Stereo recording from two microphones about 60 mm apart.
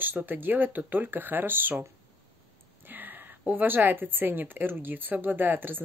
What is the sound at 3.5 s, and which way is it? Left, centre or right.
Speech, right.